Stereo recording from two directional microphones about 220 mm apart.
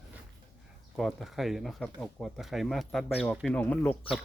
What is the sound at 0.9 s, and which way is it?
Speech, centre (ahead or behind).